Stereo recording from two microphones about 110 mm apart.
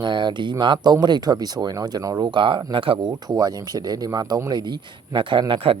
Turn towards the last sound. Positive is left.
turn(degrees=-50)  # may be behind; listen again after turning